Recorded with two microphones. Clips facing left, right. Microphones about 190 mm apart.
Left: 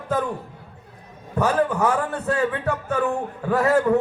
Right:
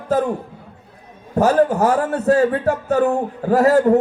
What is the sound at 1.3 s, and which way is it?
A man's voice, 35° right (ahead or behind).